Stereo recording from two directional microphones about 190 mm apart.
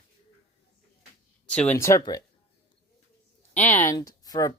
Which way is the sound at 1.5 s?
5° left (ahead or behind).